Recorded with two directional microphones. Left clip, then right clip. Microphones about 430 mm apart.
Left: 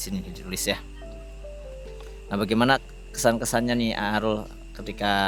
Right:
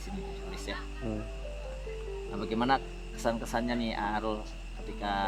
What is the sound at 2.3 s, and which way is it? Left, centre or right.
Speech, left.